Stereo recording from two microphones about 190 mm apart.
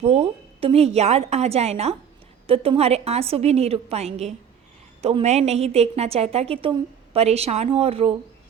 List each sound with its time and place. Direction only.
0.0 s a woman's voice: 30° right (ahead or behind)